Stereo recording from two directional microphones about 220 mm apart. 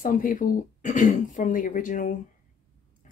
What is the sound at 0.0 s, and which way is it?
Speech, 35° left (ahead or behind).